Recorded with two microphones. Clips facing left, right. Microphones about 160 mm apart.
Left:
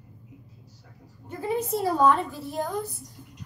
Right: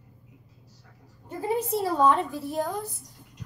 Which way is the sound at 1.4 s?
30° right (ahead or behind).